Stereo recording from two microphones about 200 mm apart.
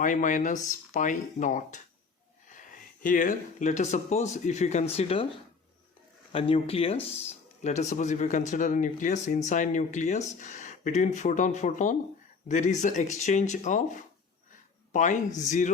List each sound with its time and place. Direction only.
0.0 s speech: 40° left (ahead or behind)
6.3 s speech: 30° left (ahead or behind)
14.9 s speech: 40° left (ahead or behind)